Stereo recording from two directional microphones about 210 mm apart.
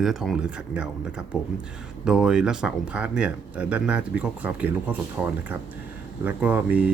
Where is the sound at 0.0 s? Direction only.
Centre (ahead or behind).